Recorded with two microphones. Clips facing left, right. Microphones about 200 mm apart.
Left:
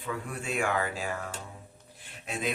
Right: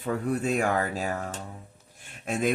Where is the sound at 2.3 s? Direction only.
45° right (ahead or behind).